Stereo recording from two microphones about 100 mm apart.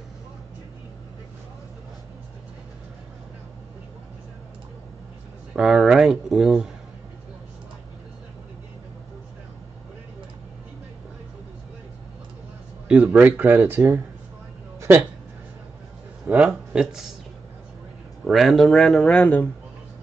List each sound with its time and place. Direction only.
5.6 s speech: 5° right (ahead or behind)
12.8 s speech: 10° right (ahead or behind)
16.3 s speech: 10° right (ahead or behind)
18.2 s speech: centre (ahead or behind)